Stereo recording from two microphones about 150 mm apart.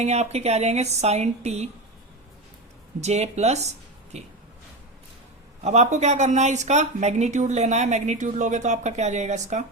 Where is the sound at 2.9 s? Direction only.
45° right (ahead or behind).